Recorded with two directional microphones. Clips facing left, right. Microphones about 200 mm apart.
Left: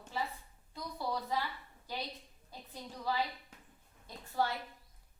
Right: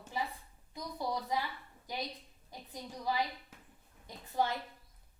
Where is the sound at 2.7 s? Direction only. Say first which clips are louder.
Right 1 dB; 15° right (ahead or behind).